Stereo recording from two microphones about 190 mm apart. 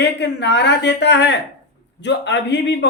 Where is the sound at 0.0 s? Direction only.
65° left (ahead or behind).